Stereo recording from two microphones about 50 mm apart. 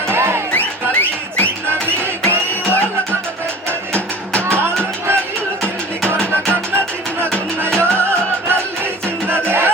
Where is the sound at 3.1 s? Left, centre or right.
Right.